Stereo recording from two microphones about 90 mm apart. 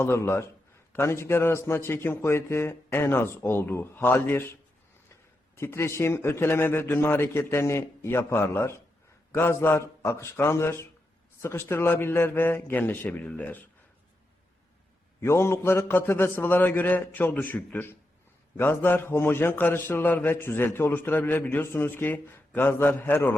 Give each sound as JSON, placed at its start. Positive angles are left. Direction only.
{"t": 0.0, "sound": "a man's voice", "side_deg": 30}
{"t": 5.5, "sound": "a man's voice", "side_deg": 30}
{"t": 15.2, "sound": "a man's voice", "side_deg": 30}